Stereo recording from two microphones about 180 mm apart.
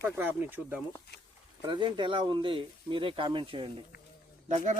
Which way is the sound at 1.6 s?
25° right (ahead or behind).